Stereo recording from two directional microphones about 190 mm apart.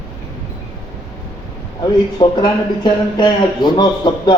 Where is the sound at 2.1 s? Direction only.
20° left (ahead or behind).